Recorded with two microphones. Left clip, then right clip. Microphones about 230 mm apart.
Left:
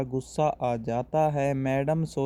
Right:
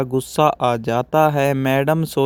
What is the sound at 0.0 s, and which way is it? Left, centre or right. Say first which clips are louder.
Speech: right 10 dB; right.